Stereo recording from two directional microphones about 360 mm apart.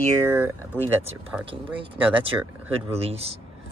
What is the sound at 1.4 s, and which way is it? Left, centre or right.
Speech, centre.